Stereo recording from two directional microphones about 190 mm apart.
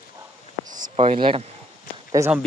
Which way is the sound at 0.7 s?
40° right (ahead or behind).